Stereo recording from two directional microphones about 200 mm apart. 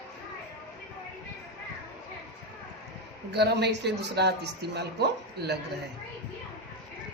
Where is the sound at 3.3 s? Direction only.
55° right (ahead or behind).